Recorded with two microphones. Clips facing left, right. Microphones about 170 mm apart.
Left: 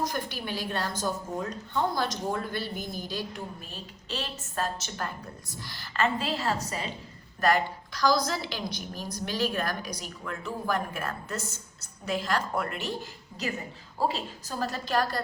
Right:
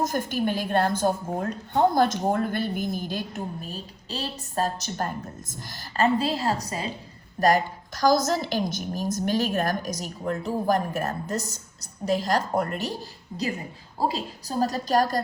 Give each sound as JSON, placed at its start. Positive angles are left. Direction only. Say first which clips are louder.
{"t": 0.0, "sound": "a woman's voice", "louder": "right 7 dB", "side_deg": -50}